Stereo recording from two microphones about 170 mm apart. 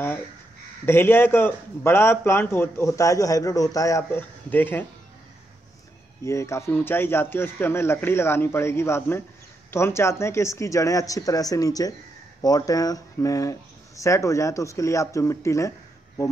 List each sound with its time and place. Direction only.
0.8 s speech: 15° left (ahead or behind)
6.2 s speech: 15° left (ahead or behind)